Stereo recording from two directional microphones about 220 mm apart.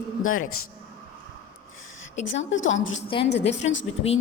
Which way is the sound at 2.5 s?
60° left (ahead or behind).